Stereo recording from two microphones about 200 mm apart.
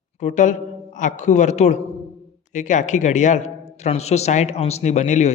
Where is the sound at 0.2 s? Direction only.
35° left (ahead or behind).